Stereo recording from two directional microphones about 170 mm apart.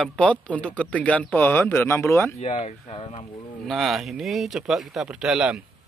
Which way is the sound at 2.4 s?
40° left (ahead or behind).